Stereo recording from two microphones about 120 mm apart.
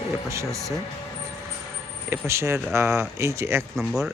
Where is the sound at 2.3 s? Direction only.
20° right (ahead or behind).